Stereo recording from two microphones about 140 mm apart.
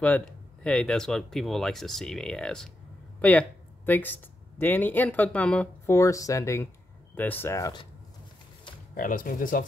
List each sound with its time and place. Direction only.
0.0 s speech: 5° left (ahead or behind)
5.9 s speech: 20° left (ahead or behind)
8.9 s speech: 75° left (ahead or behind)